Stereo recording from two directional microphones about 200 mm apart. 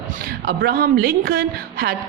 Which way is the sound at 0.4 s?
50° right (ahead or behind).